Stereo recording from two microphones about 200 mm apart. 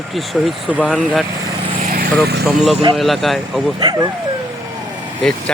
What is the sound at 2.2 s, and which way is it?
Speech, 55° right (ahead or behind).